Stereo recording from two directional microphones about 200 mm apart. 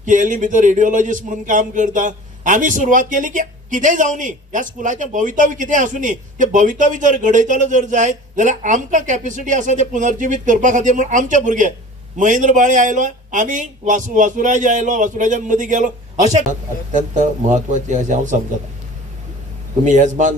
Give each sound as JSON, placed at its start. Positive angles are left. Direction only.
{"t": 0.0, "sound": "speech", "side_deg": -40}
{"t": 19.8, "sound": "speech", "side_deg": -40}